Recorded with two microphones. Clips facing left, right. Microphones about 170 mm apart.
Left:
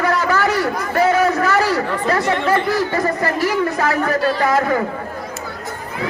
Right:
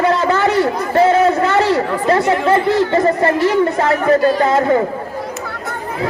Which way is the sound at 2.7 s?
25° right (ahead or behind).